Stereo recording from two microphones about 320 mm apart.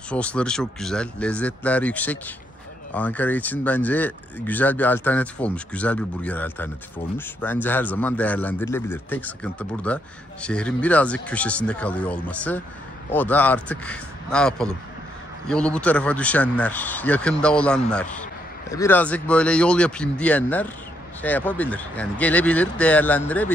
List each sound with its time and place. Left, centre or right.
0.1 s speech: centre